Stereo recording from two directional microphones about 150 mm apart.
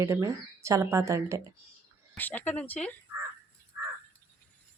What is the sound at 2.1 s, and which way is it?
Speech, 10° left (ahead or behind).